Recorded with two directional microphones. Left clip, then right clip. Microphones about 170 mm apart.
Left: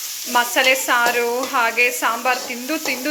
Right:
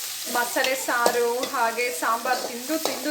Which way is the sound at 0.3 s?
10° left (ahead or behind).